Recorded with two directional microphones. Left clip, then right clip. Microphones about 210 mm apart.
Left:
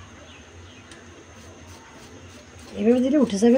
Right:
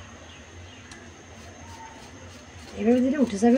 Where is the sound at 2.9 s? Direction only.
35° left (ahead or behind).